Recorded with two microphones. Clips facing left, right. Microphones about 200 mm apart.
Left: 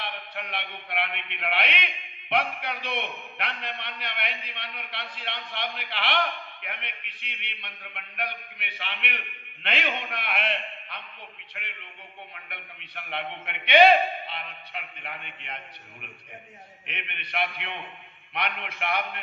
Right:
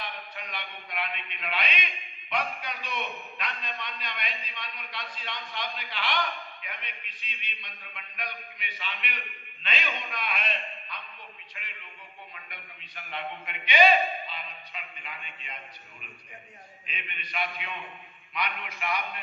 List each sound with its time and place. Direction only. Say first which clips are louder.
0.0 s a man's voice: left 3 dB; 65° left (ahead or behind)